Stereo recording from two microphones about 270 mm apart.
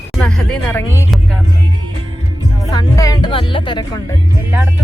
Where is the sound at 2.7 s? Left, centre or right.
Centre.